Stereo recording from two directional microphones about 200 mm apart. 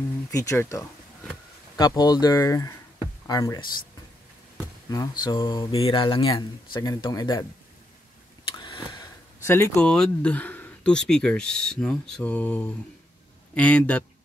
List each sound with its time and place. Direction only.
0.3 s speech: 15° left (ahead or behind)
4.8 s speech: 20° left (ahead or behind)
8.5 s a man's voice: 25° left (ahead or behind); by 14.0 s 5° left (ahead or behind)